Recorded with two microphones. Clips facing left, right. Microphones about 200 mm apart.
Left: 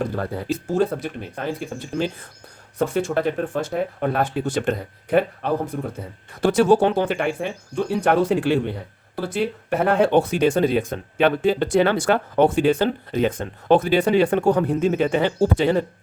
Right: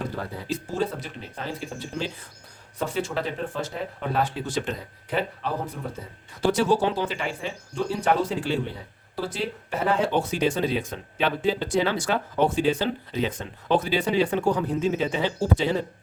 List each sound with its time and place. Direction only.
0.2 s speech: 55° left (ahead or behind)